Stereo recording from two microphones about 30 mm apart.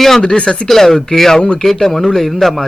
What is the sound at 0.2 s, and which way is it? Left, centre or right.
Speech, left.